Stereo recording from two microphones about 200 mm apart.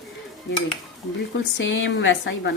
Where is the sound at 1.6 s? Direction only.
70° left (ahead or behind).